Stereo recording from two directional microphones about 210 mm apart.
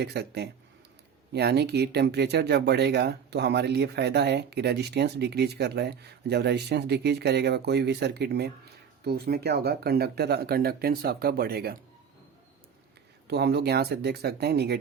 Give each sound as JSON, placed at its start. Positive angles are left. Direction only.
{"t": 0.0, "sound": "speech", "side_deg": -50}
{"t": 13.2, "sound": "speech", "side_deg": -50}